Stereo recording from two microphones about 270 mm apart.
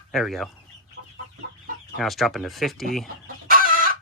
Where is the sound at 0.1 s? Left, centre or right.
Centre.